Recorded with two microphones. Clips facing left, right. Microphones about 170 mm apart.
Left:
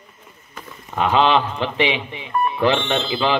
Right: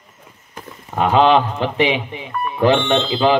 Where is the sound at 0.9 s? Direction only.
45° right (ahead or behind).